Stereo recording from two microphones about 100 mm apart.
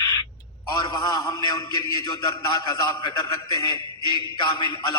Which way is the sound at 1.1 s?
40° left (ahead or behind).